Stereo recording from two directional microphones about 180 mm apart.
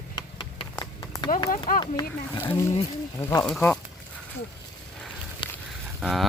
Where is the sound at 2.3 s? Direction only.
15° left (ahead or behind).